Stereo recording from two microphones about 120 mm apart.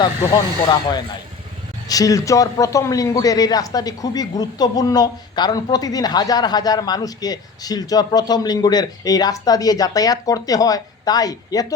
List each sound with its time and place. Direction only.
0.7 s a man's voice: 35° left (ahead or behind)